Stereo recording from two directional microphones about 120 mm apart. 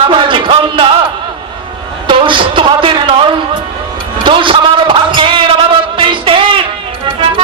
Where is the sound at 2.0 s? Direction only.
45° right (ahead or behind).